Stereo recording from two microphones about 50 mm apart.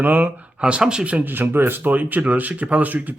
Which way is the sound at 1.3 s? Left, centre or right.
Right.